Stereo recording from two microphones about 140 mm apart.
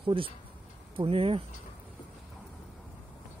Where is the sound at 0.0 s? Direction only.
40° right (ahead or behind).